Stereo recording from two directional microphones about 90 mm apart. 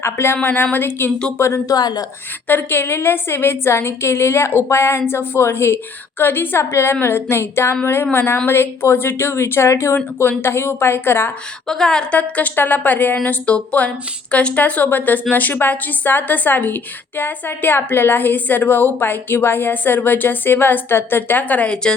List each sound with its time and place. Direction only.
0.0 s a woman's voice: 30° left (ahead or behind)
1.7 s speech: 50° left (ahead or behind)
2.5 s a woman's voice: 20° left (ahead or behind)
11.7 s a woman's voice: 5° left (ahead or behind)